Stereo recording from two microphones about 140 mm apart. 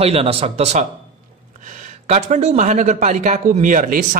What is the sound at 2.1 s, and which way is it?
Speech, 50° right (ahead or behind).